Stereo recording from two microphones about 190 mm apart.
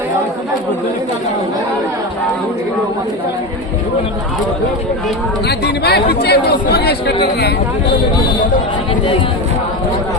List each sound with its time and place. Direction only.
5.5 s speech: 60° left (ahead or behind)